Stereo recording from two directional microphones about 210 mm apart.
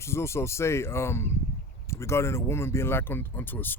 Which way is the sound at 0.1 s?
10° left (ahead or behind).